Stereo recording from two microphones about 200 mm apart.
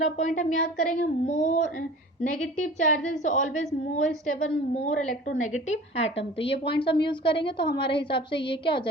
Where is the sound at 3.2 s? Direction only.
35° left (ahead or behind).